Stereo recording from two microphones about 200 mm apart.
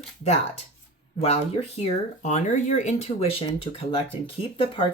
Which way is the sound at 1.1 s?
30° left (ahead or behind).